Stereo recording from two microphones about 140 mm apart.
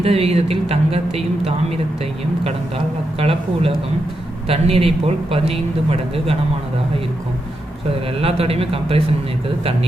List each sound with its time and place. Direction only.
0.0 s a man's voice: 45° right (ahead or behind)
8.2 s a man's voice: 45° right (ahead or behind)